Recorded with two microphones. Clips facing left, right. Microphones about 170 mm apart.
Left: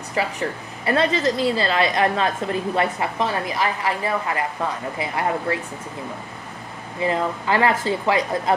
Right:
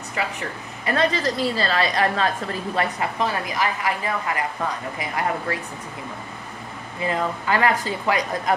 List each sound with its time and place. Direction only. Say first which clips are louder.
0.2 s a woman's voice: left 4 dB; 35° left (ahead or behind)
7.0 s a woman's voice: left 2 dB; 25° left (ahead or behind)